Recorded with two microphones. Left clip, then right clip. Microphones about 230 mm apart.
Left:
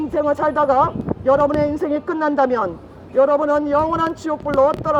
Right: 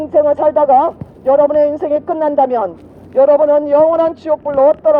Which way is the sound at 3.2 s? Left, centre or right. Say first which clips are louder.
Right 6 dB; right.